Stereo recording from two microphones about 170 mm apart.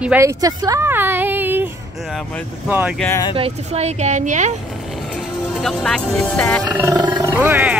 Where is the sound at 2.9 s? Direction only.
15° left (ahead or behind).